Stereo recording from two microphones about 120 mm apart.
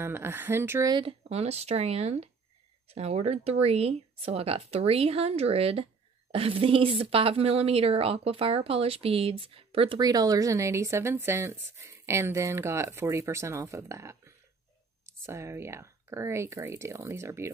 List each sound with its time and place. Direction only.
0.0 s speech: 20° right (ahead or behind)
0.8 s speech: 40° right (ahead or behind)
1.3 s a woman's voice: 60° right (ahead or behind)
9.9 s speech: 30° right (ahead or behind)